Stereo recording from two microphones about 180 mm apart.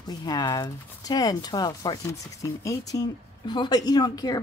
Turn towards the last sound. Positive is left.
turn(degrees=20)  # may be behind; listen again after turning